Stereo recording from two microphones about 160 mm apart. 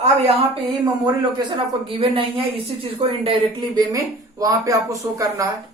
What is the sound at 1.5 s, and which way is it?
Speech, 30° right (ahead or behind).